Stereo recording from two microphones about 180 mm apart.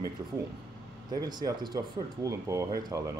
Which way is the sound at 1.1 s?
20° right (ahead or behind).